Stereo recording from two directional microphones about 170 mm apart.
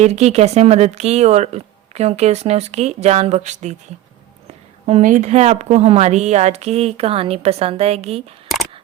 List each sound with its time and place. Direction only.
0.0 s speech: 40° right (ahead or behind)
4.9 s speech: 45° right (ahead or behind)